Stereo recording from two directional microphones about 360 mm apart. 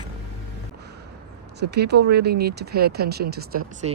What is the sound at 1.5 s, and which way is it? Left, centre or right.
Speech, right.